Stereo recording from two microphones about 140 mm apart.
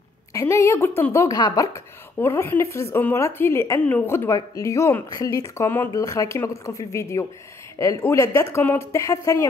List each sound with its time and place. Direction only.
0.3 s speech: 20° left (ahead or behind)